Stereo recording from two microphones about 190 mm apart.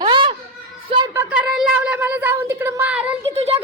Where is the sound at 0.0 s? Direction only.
25° right (ahead or behind).